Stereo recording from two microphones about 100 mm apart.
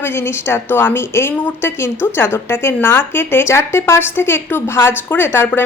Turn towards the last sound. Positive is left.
turn(degrees=20)  # may be behind; listen again after turning